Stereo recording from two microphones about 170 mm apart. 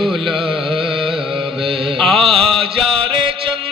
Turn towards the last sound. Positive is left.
turn(degrees=-30)  # may be behind; listen again after turning